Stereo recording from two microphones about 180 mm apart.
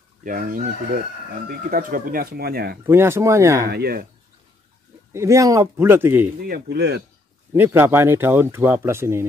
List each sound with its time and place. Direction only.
0.2 s speech: 50° right (ahead or behind)
1.7 s speech: 50° right (ahead or behind)
2.9 s speech: 15° right (ahead or behind)
3.6 s speech: 60° right (ahead or behind)
5.1 s speech: 15° right (ahead or behind)
6.4 s speech: 55° right (ahead or behind)
7.5 s speech: 10° right (ahead or behind)